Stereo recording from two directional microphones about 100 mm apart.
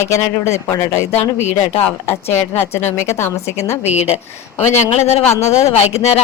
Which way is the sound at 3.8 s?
90° left.